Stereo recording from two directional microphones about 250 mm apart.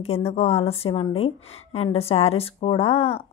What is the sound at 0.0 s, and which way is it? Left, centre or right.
Speech, left.